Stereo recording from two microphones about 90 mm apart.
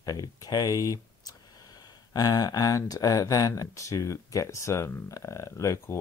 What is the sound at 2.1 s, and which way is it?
Speech, 45° left (ahead or behind).